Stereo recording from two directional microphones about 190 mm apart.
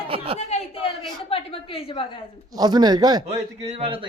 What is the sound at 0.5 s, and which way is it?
A man's voice, 35° left (ahead or behind).